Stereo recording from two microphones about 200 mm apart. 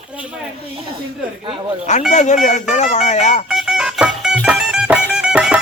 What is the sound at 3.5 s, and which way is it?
Music, centre (ahead or behind).